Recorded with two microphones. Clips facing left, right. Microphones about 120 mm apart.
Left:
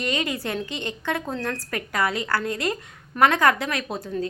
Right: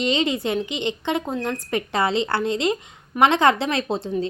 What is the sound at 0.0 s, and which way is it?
Speech, 20° right (ahead or behind).